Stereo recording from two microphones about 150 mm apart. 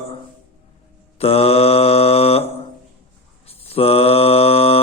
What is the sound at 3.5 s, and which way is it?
Mantra, 40° left (ahead or behind).